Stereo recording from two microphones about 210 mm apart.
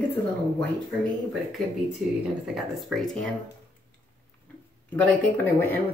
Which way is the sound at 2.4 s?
Centre (ahead or behind).